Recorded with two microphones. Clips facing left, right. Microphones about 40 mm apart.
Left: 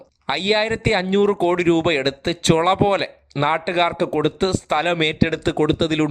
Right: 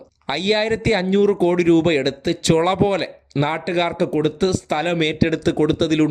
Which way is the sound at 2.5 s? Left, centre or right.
Left.